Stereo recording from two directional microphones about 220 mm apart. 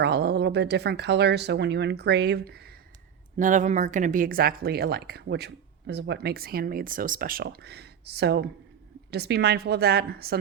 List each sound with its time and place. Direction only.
0.0 s speech: 45° right (ahead or behind)
3.3 s speech: 35° right (ahead or behind)